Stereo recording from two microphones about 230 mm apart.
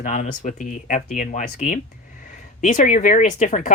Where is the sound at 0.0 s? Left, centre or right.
Left.